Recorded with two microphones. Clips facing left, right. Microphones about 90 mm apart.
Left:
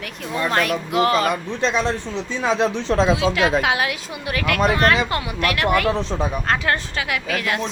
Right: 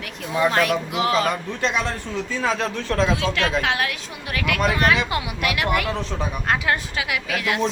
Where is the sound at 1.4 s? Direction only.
30° left (ahead or behind).